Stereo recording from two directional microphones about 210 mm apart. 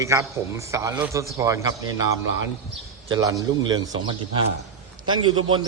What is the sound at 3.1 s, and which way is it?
A man's voice, 15° right (ahead or behind).